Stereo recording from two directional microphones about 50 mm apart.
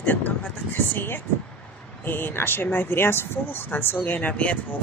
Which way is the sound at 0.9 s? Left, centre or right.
Left.